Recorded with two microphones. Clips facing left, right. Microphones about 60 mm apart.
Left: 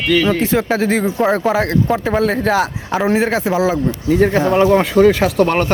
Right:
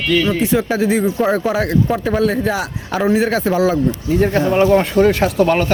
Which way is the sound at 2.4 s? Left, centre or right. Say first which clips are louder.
Left 4 dB; left.